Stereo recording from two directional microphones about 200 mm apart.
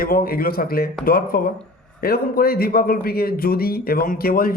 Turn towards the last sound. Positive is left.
turn(degrees=45)  # may be behind; listen again after turning